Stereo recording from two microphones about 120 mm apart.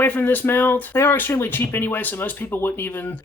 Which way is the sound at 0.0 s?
15° left (ahead or behind).